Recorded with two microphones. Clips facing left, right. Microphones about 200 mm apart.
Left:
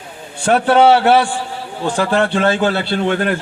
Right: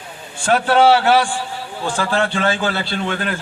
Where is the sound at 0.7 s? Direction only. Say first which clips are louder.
Left 2 dB; 55° left (ahead or behind).